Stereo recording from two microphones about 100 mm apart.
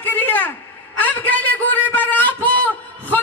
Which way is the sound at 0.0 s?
15° left (ahead or behind).